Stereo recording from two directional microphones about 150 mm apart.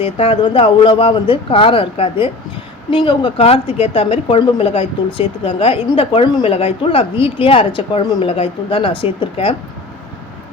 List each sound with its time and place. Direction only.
0.0 s speech: 40° left (ahead or behind)